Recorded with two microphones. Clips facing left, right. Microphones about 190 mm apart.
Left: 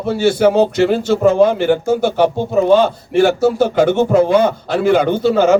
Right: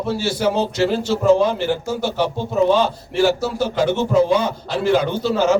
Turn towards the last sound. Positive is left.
turn(degrees=55)  # may be behind; listen again after turning